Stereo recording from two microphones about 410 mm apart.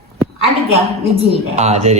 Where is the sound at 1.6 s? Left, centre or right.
Centre.